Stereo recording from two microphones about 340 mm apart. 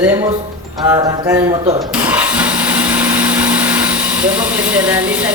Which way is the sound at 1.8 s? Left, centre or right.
Centre.